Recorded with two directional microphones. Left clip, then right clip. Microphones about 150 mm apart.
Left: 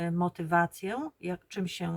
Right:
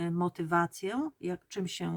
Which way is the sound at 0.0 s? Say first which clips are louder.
Left 1 dB; 25° right (ahead or behind).